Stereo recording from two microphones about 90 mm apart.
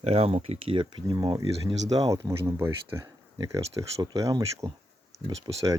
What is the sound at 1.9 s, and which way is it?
Speech, 40° right (ahead or behind).